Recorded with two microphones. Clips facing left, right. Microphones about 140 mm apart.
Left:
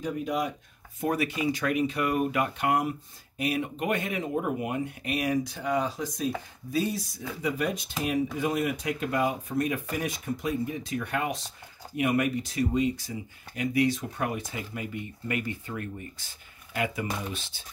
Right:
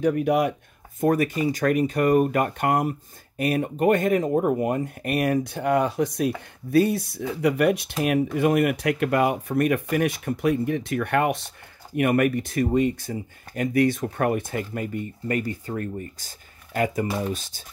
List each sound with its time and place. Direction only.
0.0 s speech: 65° right (ahead or behind)
1.0 s speech: 45° right (ahead or behind)